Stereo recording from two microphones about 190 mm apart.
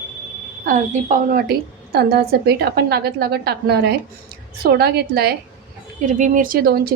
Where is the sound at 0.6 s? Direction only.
45° right (ahead or behind).